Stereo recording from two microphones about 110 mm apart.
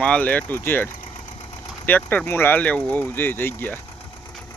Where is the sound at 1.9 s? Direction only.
15° left (ahead or behind).